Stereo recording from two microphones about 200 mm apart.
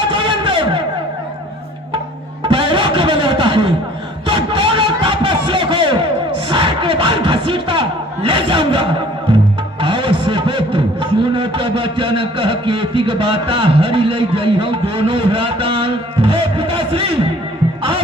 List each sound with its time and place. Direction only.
0.1 s vehicle: 25° right (ahead or behind)
2.4 s music: 25° right (ahead or behind)
4.3 s a sound: 25° right (ahead or behind)